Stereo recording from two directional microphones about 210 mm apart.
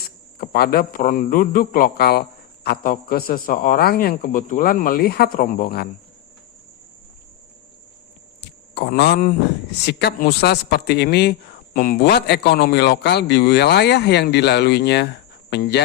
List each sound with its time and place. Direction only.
0.3 s speech: 45° left (ahead or behind)
8.4 s a sound: 50° left (ahead or behind)
9.8 s speech: 50° left (ahead or behind)